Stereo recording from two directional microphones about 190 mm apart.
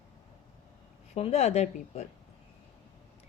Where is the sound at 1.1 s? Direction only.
35° left (ahead or behind).